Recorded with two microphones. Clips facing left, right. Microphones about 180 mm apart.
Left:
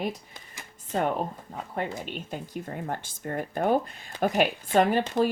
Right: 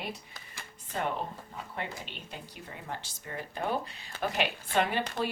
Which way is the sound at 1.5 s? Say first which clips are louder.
Left 7 dB; 45° left (ahead or behind).